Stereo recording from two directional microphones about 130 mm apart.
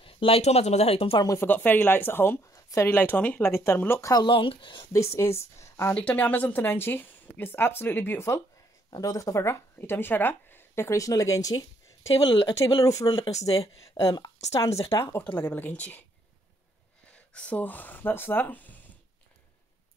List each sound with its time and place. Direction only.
0.0 s speech: 45° left (ahead or behind)
1.2 s a woman's voice: 25° left (ahead or behind)
1.5 s speech: 15° left (ahead or behind)
4.2 s speech: 40° left (ahead or behind)
4.9 s a woman's voice: 20° left (ahead or behind)
5.9 s speech: 10° left (ahead or behind); by 12.1 s 25° left (ahead or behind)
12.2 s speech: 40° left (ahead or behind)
12.5 s a woman's voice: 25° left (ahead or behind)
17.3 s speech: 10° left (ahead or behind)